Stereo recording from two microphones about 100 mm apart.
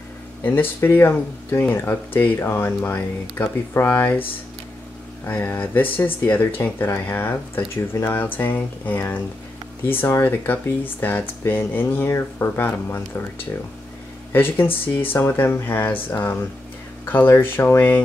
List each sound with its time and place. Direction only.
0.4 s speech: 20° left (ahead or behind)
14.3 s speech: 20° left (ahead or behind)